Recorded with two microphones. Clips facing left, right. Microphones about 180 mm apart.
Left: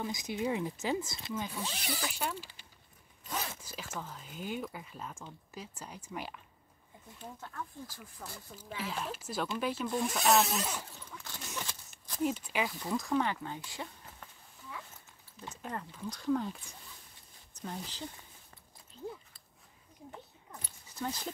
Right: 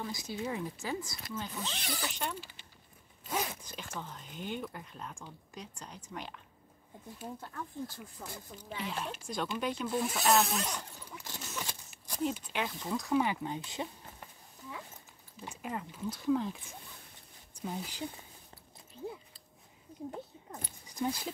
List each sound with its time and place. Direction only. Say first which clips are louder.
0.0 s speech: left 3 dB; 20° left (ahead or behind)
1.3 s speech: left 2 dB; 10° left (ahead or behind)
3.6 s speech: even; 5° left (ahead or behind)
7.3 s speech: right 1 dB; 30° right (ahead or behind)
8.2 s speech: right 1 dB; 5° left (ahead or behind)
11.0 s zipper: right 1 dB; 10° right (ahead or behind)
11.6 s a sound: right 1 dB; 15° right (ahead or behind)
12.4 s speech: left 2 dB; 5° left (ahead or behind); by 13.8 s 20° right (ahead or behind)
15.4 s speech: right 1 dB; 10° right (ahead or behind)
20.1 s a sound: right 4 dB; 45° right (ahead or behind)
20.8 s zipper: right 4 dB; 15° right (ahead or behind)